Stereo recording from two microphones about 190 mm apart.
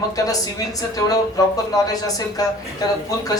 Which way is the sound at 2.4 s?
20° left (ahead or behind).